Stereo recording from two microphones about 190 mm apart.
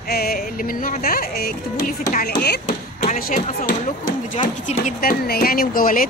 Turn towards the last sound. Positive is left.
turn(degrees=45)  # may be behind; listen again after turning